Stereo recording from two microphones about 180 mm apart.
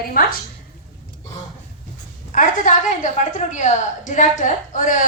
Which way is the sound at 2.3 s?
45° left (ahead or behind).